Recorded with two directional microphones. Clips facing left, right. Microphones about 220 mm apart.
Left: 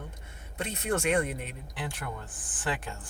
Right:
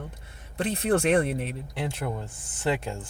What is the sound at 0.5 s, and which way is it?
Speech, 30° right (ahead or behind).